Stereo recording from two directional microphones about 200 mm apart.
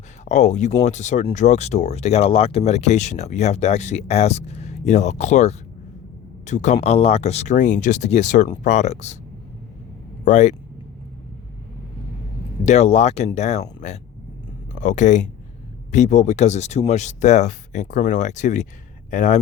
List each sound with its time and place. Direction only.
0.3 s a man's voice: 35° left (ahead or behind)
10.2 s speech: 35° left (ahead or behind)
12.6 s speech: 35° left (ahead or behind)